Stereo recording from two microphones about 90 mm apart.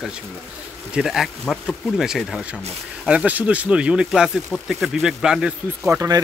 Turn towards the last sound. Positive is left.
turn(degrees=-35)  # may be behind; listen again after turning